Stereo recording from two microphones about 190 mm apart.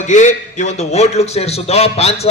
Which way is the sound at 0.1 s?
40° left (ahead or behind).